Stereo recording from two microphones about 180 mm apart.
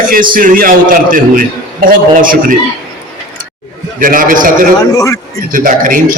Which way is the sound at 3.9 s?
50° right (ahead or behind).